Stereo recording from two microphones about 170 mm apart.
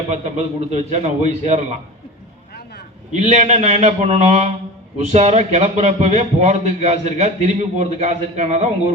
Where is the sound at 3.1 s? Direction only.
40° right (ahead or behind).